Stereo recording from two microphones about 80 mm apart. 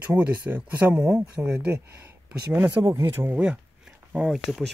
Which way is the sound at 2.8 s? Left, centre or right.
Right.